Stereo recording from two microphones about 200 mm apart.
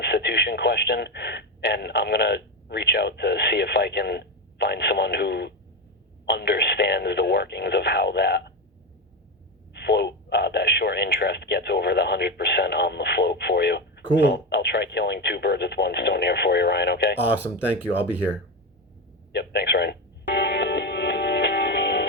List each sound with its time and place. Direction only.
0.0 s speech: 55° left (ahead or behind)
9.7 s speech: 55° left (ahead or behind)
17.2 s speech: 10° right (ahead or behind)
19.3 s music: 55° left (ahead or behind)